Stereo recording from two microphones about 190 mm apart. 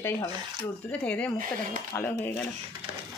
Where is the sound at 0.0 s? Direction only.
15° left (ahead or behind).